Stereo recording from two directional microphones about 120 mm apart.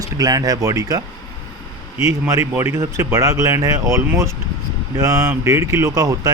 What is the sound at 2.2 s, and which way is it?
Speech, 20° right (ahead or behind).